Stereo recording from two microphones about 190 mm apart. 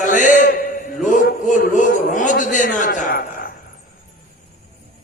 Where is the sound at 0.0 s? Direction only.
40° left (ahead or behind).